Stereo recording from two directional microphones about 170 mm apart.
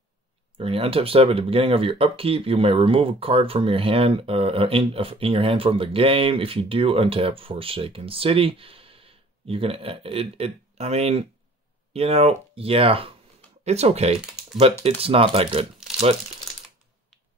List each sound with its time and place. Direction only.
0.6 s speech: 35° right (ahead or behind)